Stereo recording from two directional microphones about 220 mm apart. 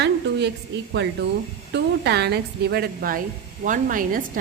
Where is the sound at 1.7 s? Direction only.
50° right (ahead or behind).